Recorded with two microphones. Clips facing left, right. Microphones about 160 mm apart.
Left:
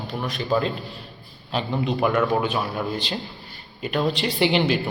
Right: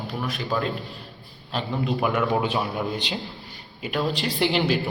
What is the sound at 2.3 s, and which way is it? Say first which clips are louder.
Speech: left 1 dB; 20° right (ahead or behind).